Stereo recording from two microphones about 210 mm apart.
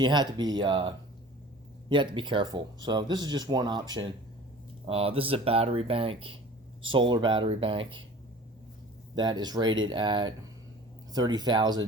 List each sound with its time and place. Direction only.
0.0 s speech: 20° right (ahead or behind)
9.1 s speech: 20° right (ahead or behind)